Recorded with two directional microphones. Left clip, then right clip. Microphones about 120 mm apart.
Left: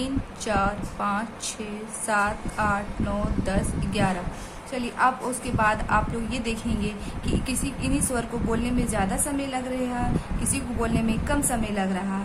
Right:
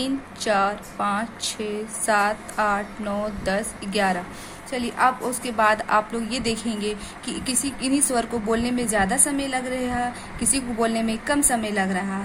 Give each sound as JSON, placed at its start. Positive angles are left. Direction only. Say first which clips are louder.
{"t": 0.0, "sound": "speech", "louder": "right 4 dB", "side_deg": -40}